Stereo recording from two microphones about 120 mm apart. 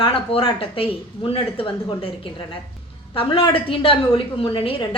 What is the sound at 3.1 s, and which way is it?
A woman's voice, 45° left (ahead or behind).